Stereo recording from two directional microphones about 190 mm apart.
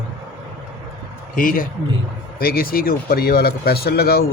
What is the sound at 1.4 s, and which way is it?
Speech, 45° left (ahead or behind).